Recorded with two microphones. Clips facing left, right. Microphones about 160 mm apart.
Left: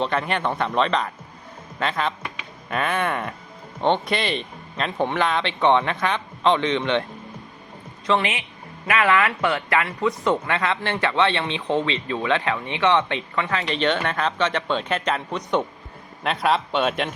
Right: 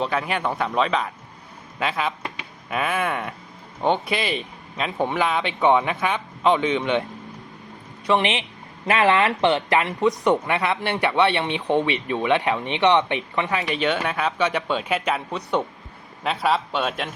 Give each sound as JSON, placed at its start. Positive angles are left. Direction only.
{"t": 0.0, "sound": "speech", "side_deg": -5}
{"t": 8.0, "sound": "a man's voice", "side_deg": -20}